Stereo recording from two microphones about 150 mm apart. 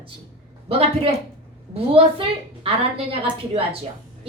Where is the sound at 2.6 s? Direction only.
40° right (ahead or behind).